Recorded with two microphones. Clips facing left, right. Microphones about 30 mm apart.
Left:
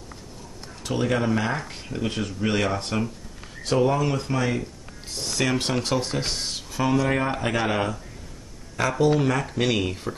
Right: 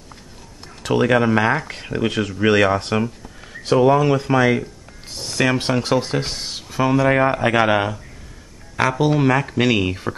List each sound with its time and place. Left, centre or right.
0.8 s speech: right
2.7 s speech: right; by 5.9 s centre
5.9 s speech: right
6.2 s speech: centre
7.5 s speech: right
9.2 s speech: right